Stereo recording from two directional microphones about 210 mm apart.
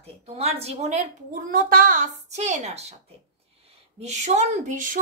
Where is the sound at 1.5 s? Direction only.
45° right (ahead or behind).